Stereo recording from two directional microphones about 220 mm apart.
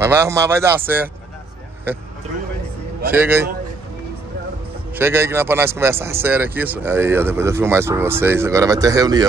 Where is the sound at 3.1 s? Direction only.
10° right (ahead or behind).